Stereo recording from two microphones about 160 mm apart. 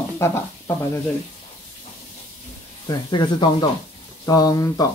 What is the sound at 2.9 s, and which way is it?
Speech, 25° left (ahead or behind).